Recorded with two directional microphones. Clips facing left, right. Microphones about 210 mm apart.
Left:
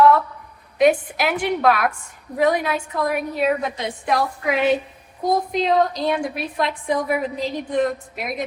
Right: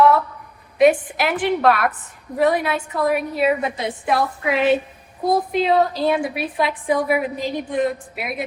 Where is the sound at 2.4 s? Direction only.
5° right (ahead or behind).